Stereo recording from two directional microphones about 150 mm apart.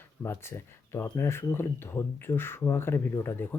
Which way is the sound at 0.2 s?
15° left (ahead or behind).